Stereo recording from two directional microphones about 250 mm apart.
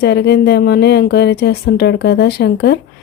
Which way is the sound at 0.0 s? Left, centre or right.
Left.